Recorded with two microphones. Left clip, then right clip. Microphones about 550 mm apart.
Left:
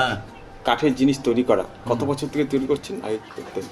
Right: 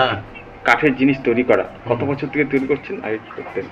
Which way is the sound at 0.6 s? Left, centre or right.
Left.